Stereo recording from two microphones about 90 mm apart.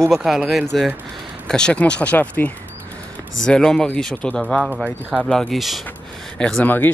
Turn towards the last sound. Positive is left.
turn(degrees=20)  # may be behind; listen again after turning